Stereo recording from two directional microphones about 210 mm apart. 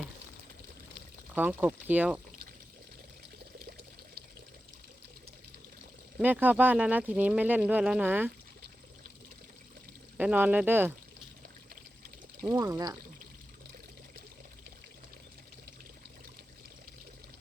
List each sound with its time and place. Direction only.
1.4 s speech: 10° right (ahead or behind)
6.1 s speech: 5° right (ahead or behind)
10.2 s speech: 10° right (ahead or behind)
12.4 s speech: 15° right (ahead or behind)